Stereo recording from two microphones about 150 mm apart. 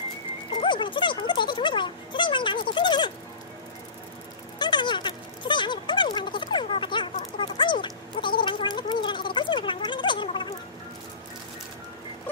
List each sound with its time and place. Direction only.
0.6 s speech: 35° left (ahead or behind)
4.6 s speech: 30° left (ahead or behind)